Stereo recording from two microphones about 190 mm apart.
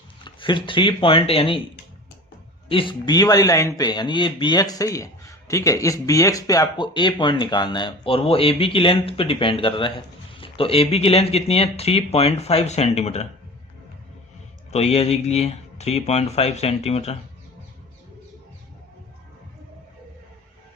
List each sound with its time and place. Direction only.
0.3 s speech: 25° left (ahead or behind)
2.6 s speech: 25° left (ahead or behind)
14.7 s speech: 35° left (ahead or behind)